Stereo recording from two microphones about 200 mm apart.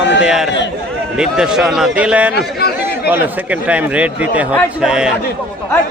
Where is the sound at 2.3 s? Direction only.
50° left (ahead or behind).